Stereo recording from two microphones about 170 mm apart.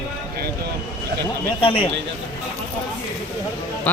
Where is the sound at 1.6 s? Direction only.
30° left (ahead or behind).